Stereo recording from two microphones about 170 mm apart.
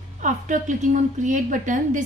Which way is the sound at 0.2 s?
50° right (ahead or behind).